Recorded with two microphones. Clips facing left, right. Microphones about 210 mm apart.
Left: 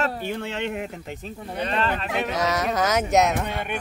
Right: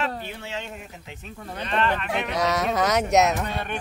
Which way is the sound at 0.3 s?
55° left (ahead or behind).